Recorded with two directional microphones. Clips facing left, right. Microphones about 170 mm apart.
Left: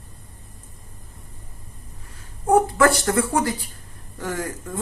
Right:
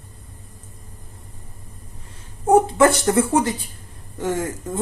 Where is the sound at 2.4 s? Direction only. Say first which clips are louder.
Right 2 dB; 20° right (ahead or behind).